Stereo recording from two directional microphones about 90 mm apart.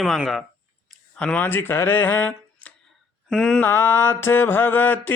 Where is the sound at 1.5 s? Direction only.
25° left (ahead or behind).